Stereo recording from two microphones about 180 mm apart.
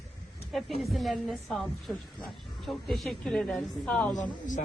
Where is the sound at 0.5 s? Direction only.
Centre (ahead or behind).